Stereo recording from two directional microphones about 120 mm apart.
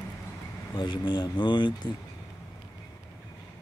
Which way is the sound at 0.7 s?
35° left (ahead or behind).